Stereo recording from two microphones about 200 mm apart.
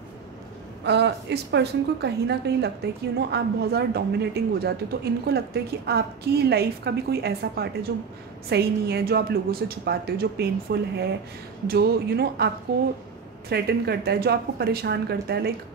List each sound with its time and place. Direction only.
0.8 s a woman's voice: 60° right (ahead or behind)